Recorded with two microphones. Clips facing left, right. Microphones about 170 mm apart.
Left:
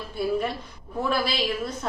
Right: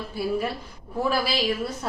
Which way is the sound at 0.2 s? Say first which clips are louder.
Left 1 dB; 5° right (ahead or behind).